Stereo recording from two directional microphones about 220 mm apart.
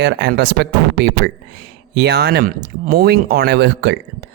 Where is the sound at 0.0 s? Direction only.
50° right (ahead or behind).